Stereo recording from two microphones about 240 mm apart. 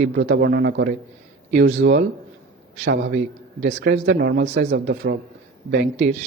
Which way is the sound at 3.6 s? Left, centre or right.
Right.